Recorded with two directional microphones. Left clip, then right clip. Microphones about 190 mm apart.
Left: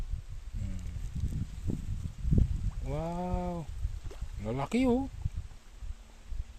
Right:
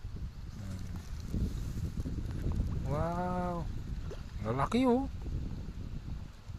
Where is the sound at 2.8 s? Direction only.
30° left (ahead or behind).